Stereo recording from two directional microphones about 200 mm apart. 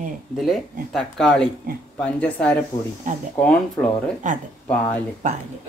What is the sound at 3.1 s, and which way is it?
Speech, 40° right (ahead or behind).